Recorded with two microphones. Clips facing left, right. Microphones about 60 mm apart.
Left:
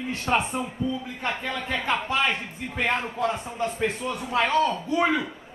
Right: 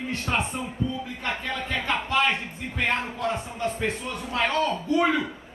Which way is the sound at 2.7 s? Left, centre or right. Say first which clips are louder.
Left 1 dB; centre.